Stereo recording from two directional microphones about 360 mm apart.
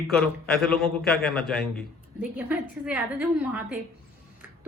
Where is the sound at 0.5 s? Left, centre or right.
Centre.